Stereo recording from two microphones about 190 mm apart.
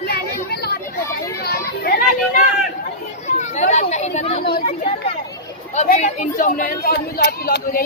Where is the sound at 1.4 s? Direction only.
55° left (ahead or behind).